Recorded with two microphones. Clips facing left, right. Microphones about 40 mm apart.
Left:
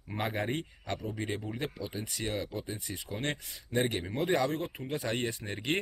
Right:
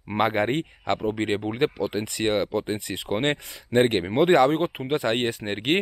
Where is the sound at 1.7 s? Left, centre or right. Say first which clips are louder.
Right 11 dB; right.